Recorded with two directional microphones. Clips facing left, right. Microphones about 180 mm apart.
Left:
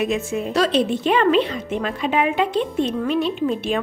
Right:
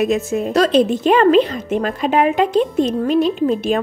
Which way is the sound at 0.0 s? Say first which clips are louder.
Right 5 dB; 40° right (ahead or behind).